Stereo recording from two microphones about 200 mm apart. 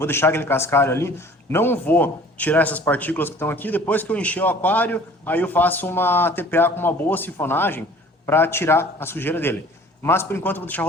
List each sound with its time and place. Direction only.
0.0 s a man's voice: 10° left (ahead or behind)